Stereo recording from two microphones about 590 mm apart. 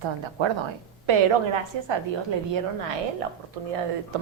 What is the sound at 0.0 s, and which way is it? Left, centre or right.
A woman's voice, right.